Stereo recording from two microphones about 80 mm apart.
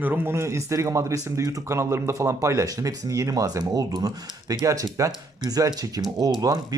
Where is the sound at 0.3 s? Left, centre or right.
Right.